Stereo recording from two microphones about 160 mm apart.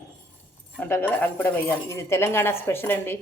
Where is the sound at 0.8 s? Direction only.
15° left (ahead or behind).